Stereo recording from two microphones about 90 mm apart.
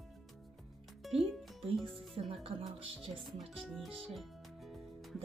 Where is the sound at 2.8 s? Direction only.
80° right.